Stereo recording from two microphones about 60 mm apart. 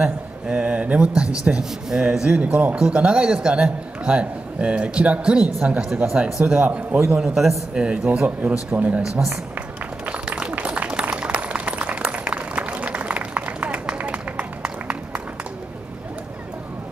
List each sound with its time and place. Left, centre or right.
0.0 s a man's voice: centre
5.6 s speech: centre
6.6 s a man's voice: right
7.1 s a man's voice: centre; by 9.0 s right
9.0 s speech: centre
10.0 s a sound: centre